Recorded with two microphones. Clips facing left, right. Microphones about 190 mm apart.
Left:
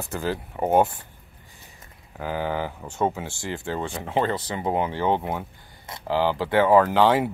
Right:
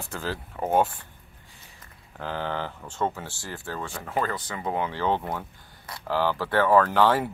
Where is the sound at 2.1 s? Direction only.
10° left (ahead or behind).